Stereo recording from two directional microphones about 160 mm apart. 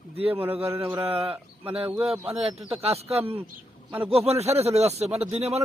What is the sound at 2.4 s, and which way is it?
A man's voice, 40° right (ahead or behind).